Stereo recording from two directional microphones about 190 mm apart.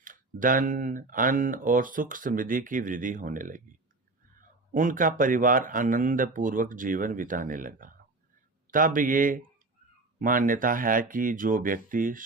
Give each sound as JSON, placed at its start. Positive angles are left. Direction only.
{"t": 0.0, "sound": "speech", "side_deg": -45}